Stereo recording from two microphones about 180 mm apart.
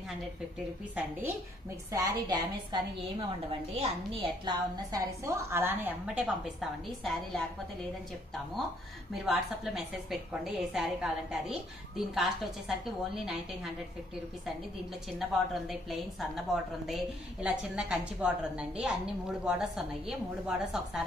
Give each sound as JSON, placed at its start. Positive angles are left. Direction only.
{"t": 1.9, "sound": "a woman's voice", "side_deg": -20}
{"t": 3.7, "sound": "a woman's voice", "side_deg": -35}
{"t": 4.9, "sound": "a woman's voice", "side_deg": -15}
{"t": 9.1, "sound": "a woman's voice", "side_deg": 0}
{"t": 15.0, "sound": "a woman's voice", "side_deg": 0}